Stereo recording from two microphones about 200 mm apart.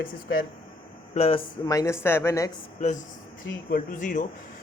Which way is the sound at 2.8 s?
35° left (ahead or behind).